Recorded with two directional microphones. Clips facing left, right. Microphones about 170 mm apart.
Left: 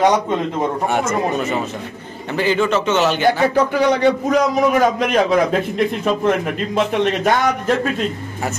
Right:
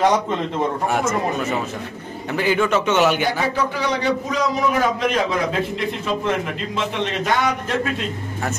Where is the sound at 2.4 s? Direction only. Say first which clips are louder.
Left 2 dB; 10° right (ahead or behind).